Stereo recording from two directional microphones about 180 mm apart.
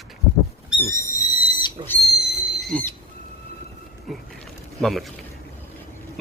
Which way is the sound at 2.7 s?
10° left (ahead or behind).